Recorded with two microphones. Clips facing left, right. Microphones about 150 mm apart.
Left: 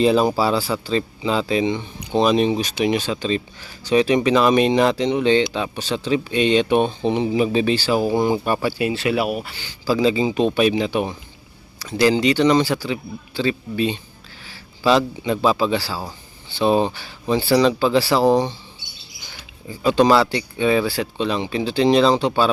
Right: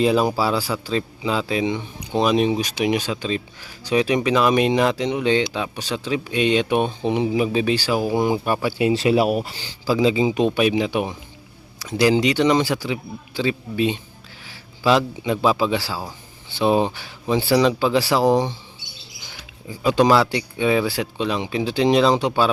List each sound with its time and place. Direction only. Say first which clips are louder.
0.0 s speech: left 2 dB; 5° right (ahead or behind)
8.8 s speech: right 3 dB; 30° right (ahead or behind)
9.8 s speech: even; 15° right (ahead or behind)